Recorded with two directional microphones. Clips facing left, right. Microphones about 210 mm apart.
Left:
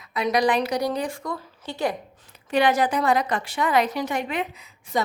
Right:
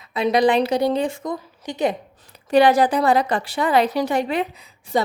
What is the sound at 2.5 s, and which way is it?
A woman's voice, 35° right (ahead or behind).